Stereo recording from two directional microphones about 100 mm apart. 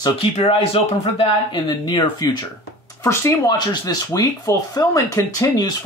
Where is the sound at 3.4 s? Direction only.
40° left (ahead or behind).